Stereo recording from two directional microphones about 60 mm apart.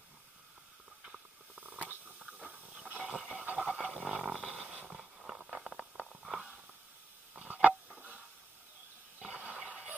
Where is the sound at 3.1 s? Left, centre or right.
Centre.